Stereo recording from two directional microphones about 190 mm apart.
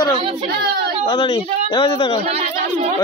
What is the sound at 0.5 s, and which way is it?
Speech, 55° right (ahead or behind).